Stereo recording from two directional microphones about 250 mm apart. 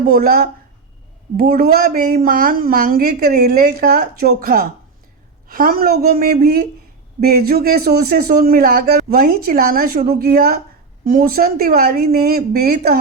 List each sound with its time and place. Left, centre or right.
0.1 s a man's voice: right